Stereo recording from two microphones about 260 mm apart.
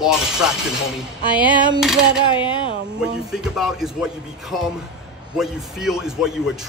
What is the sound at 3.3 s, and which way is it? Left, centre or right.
A man's voice, centre.